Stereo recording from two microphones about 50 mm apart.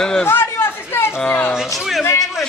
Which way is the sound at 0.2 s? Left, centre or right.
Left.